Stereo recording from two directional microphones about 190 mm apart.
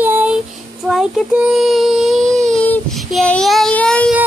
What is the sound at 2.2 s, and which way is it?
Child singing, 35° right (ahead or behind).